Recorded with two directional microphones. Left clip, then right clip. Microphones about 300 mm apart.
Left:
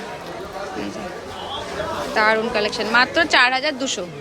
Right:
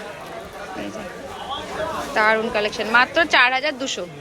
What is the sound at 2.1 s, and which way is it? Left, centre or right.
A woman's voice, centre.